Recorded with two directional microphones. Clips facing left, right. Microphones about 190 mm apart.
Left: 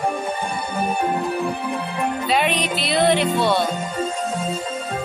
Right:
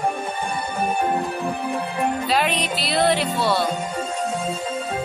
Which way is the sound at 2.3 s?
Centre (ahead or behind).